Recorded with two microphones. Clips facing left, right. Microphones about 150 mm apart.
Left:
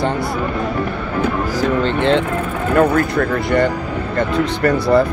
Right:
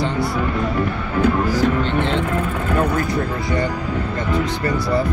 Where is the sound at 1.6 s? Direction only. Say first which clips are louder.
Left 1 dB; 90° left.